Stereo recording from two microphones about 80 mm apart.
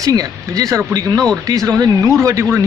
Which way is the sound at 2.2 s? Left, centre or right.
Right.